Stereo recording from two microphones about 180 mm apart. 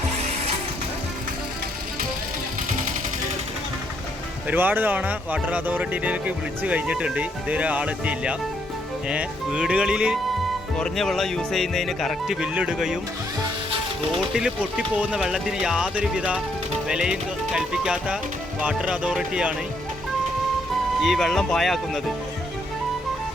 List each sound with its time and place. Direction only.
4.4 s speech: 10° right (ahead or behind)
14.3 s speech: 5° right (ahead or behind)
21.0 s speech: centre (ahead or behind)